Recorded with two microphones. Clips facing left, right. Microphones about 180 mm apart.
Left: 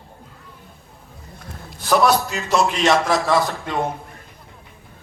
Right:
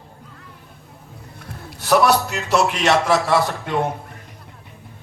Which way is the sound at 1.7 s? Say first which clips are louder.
Right 1 dB; 70° right (ahead or behind).